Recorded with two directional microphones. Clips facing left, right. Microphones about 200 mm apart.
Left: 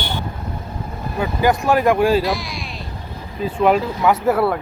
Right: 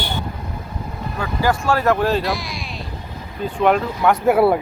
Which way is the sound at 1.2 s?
20° left (ahead or behind).